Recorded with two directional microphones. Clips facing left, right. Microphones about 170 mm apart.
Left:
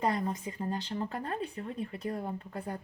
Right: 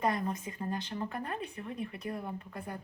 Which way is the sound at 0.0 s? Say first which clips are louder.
Left 1 dB; 25° left (ahead or behind).